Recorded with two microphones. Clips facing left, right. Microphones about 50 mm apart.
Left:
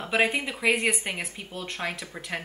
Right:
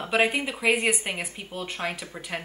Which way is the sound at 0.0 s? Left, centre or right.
Centre.